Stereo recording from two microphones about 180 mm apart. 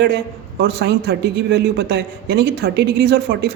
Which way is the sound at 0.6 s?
75° right (ahead or behind).